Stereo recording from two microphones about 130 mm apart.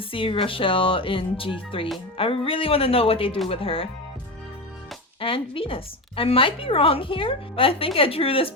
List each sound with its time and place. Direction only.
0.0 s a woman's voice: 45° left (ahead or behind)
5.2 s a woman's voice: 45° left (ahead or behind)